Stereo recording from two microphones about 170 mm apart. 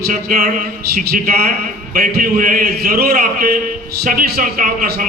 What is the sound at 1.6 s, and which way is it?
Speech, 60° right (ahead or behind).